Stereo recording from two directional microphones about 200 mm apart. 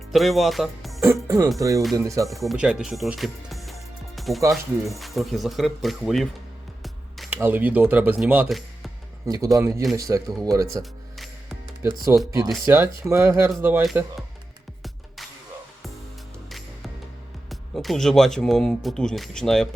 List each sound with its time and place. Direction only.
0.1 s speech: centre (ahead or behind)
1.0 s speech: 15° right (ahead or behind)
2.3 s speech: centre (ahead or behind)
9.2 s speech: 15° right (ahead or behind)
12.1 s speech: 10° right (ahead or behind)
13.8 s speech: centre (ahead or behind)
16.5 s music: centre (ahead or behind)
17.5 s speech: centre (ahead or behind)